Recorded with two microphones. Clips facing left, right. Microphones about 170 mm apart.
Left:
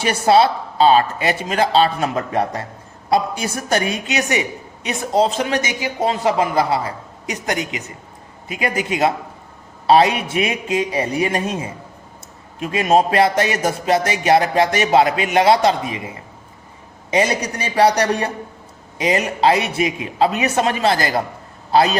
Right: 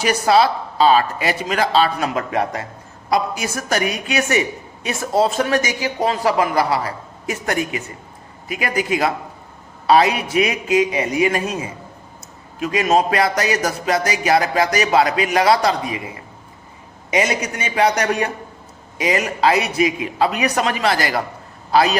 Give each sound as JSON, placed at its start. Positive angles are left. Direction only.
{"t": 0.0, "sound": "a woman's voice", "side_deg": 30}